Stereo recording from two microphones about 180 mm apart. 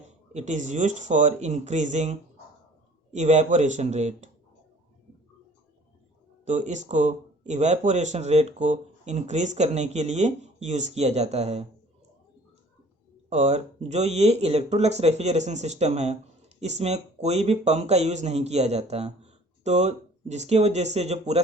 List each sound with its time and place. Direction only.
0.1 s speech: 40° right (ahead or behind)
6.4 s speech: 40° right (ahead or behind)
13.3 s speech: 40° right (ahead or behind)